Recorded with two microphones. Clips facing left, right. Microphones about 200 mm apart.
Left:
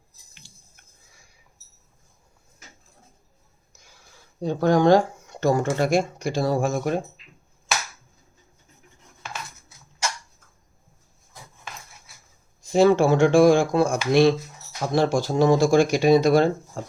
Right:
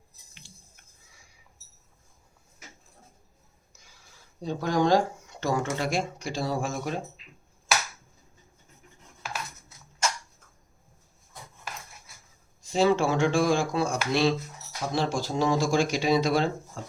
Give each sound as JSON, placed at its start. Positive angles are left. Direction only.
{"t": 4.4, "sound": "speech", "side_deg": 55}
{"t": 12.6, "sound": "speech", "side_deg": 50}